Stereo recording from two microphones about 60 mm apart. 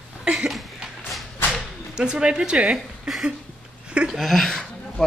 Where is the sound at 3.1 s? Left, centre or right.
Centre.